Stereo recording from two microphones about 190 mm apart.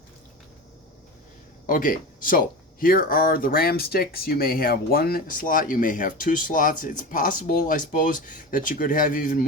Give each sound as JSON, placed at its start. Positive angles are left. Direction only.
{"t": 1.6, "sound": "speech", "side_deg": 45}